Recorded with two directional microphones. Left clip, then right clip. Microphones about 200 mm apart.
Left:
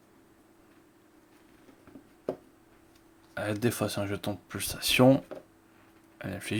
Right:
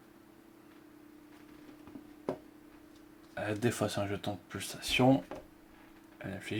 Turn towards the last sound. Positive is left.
turn(degrees=40)  # may be behind; listen again after turning